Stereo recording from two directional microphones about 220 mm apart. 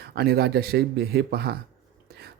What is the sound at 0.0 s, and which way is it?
Speech, 45° right (ahead or behind).